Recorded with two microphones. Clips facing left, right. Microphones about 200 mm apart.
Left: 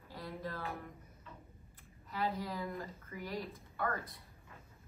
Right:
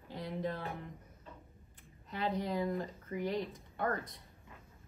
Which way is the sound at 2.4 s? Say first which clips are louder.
Right 6 dB; 20° right (ahead or behind).